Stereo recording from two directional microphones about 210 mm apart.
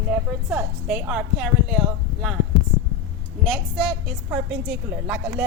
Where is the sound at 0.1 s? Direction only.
5° right (ahead or behind).